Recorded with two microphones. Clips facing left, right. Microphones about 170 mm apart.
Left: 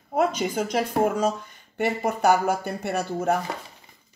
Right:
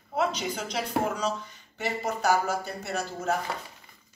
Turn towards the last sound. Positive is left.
turn(degrees=60)  # may be behind; listen again after turning